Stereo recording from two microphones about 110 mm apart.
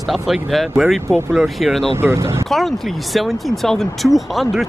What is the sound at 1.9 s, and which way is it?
Speech, 25° right (ahead or behind).